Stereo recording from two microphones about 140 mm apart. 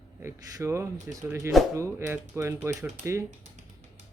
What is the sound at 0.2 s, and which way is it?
Speech, 20° right (ahead or behind).